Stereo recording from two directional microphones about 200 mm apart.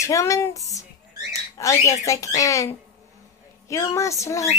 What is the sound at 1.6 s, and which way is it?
Speech, 15° left (ahead or behind).